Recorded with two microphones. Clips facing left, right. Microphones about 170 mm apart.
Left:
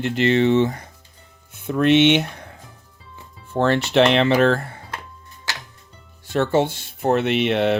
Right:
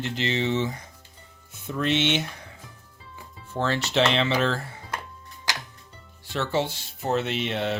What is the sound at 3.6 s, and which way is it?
Speech, 60° left (ahead or behind).